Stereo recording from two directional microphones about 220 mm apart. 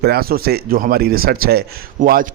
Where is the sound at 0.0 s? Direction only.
45° right (ahead or behind).